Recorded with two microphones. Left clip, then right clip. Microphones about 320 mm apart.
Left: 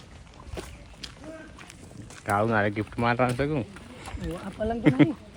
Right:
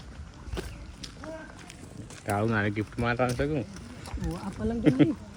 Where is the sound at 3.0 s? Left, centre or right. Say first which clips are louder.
Left 3 dB; centre.